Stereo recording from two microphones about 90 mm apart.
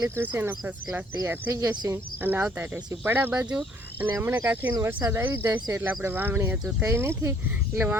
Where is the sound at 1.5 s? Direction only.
40° right (ahead or behind).